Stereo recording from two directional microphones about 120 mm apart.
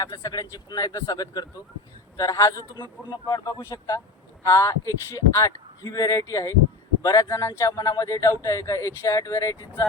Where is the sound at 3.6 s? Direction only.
25° left (ahead or behind).